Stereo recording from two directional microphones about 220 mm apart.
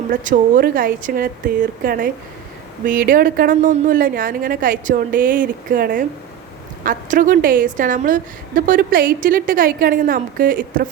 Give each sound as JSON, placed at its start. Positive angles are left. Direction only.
{"t": 0.1, "sound": "a woman's voice", "side_deg": -35}